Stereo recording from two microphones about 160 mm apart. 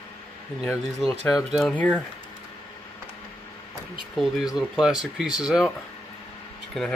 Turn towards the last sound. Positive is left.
turn(degrees=0)  # may be behind; listen again after turning